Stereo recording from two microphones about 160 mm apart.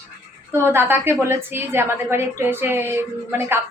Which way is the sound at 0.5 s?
15° right (ahead or behind).